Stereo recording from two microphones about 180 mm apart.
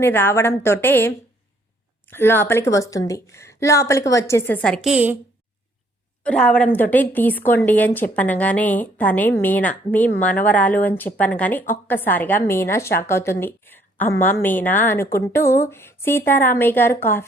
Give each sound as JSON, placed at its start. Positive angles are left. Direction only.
{"t": 0.0, "sound": "a woman's voice", "side_deg": 15}
{"t": 6.2, "sound": "a woman's voice", "side_deg": 5}